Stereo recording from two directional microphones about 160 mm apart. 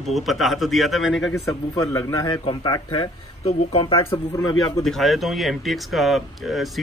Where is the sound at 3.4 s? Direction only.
40° left (ahead or behind).